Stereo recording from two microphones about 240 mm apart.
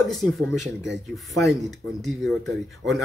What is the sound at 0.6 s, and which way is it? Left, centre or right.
Speech, right.